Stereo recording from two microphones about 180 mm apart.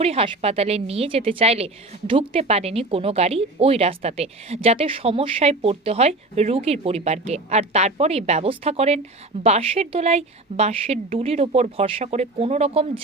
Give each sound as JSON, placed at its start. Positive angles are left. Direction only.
{"t": 0.0, "sound": "a woman's voice", "side_deg": -35}